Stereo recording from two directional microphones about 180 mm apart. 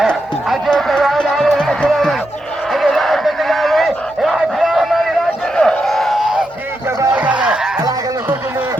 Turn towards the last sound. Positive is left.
turn(degrees=-5)  # may be behind; listen again after turning